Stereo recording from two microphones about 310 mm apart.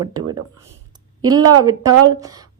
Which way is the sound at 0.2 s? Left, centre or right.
Right.